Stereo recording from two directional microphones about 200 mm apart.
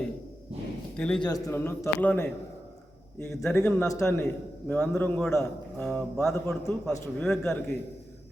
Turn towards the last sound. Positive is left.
turn(degrees=5)  # may be behind; listen again after turning